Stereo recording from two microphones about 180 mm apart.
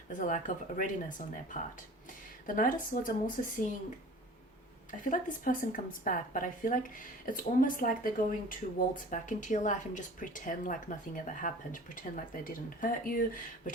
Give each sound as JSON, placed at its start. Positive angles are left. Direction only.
{"t": 0.1, "sound": "speech", "side_deg": 45}
{"t": 2.5, "sound": "speech", "side_deg": 50}
{"t": 4.9, "sound": "speech", "side_deg": 45}